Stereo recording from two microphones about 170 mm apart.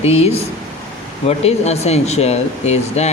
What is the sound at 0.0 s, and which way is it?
A man's voice, 35° left (ahead or behind).